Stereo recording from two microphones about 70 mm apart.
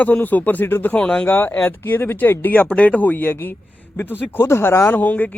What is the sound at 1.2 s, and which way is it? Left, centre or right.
Speech, left.